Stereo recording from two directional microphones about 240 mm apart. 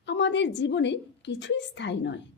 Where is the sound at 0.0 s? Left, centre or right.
Left.